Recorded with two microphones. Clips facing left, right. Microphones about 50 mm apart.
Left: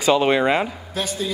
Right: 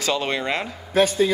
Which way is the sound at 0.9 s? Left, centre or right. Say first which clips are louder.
Right 8 dB; right.